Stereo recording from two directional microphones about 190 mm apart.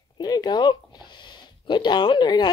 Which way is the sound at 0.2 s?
20° left (ahead or behind).